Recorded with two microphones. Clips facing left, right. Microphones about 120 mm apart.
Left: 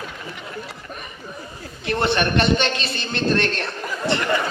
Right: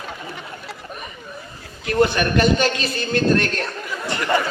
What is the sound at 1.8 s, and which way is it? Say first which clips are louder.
A man's voice: right 3 dB; 30° left (ahead or behind).